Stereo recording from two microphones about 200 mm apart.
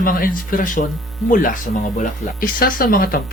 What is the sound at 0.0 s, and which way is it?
Speech, 45° left (ahead or behind).